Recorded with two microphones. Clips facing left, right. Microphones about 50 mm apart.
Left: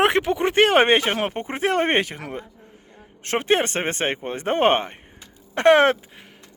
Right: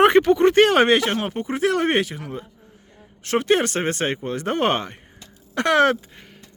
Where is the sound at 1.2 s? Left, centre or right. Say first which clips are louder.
Right 1 dB; left.